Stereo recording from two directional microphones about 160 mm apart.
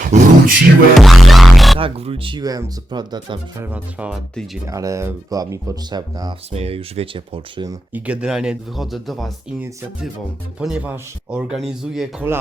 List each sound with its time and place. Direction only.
0.0 s vocal music: 55° right (ahead or behind)
0.9 s speech: centre (ahead or behind)
1.8 s speech: 35° right (ahead or behind)
3.6 s speech: 10° right (ahead or behind)
4.6 s speech: 20° right (ahead or behind)
6.5 s speech: 40° right (ahead or behind)
7.9 s speech: 10° right (ahead or behind)
10.6 s speech: 5° right (ahead or behind)
12.3 s speech: 15° right (ahead or behind)